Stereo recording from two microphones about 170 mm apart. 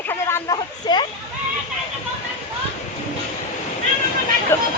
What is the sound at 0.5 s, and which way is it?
Speech, 25° left (ahead or behind).